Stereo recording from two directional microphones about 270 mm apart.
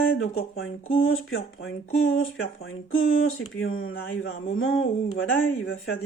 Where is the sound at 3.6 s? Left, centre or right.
Left.